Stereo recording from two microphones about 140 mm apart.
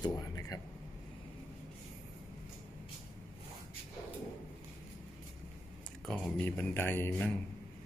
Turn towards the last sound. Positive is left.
turn(degrees=15)  # may be behind; listen again after turning